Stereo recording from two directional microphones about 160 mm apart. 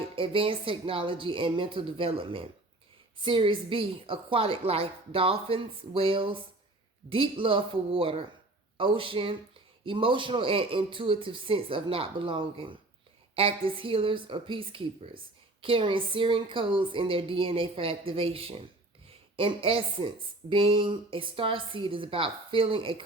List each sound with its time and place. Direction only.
0.2 s speech: 35° right (ahead or behind)